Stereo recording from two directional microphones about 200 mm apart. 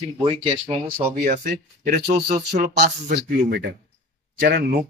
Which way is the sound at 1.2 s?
40° right (ahead or behind).